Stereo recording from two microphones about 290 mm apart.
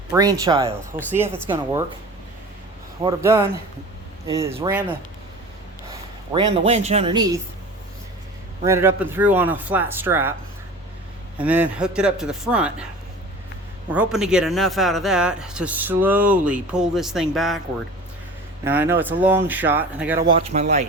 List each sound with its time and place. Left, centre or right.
0.1 s speech: centre
3.0 s speech: centre
6.3 s speech: right
8.6 s speech: centre
11.4 s speech: centre
13.9 s speech: centre
18.6 s speech: centre
20.5 s speech: right